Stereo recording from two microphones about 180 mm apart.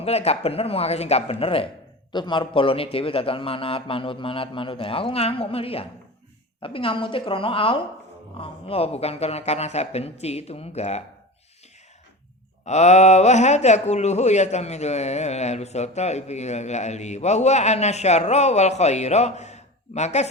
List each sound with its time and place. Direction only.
0.0 s a woman's voice: 35° left (ahead or behind)
12.6 s speech: 40° left (ahead or behind)